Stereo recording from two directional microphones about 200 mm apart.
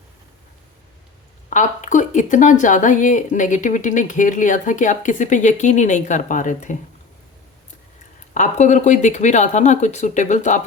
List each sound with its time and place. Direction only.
1.5 s speech: 40° left (ahead or behind)
8.3 s speech: 35° left (ahead or behind)